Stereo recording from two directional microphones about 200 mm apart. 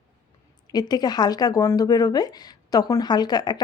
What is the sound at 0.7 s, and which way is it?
Speech, 20° left (ahead or behind).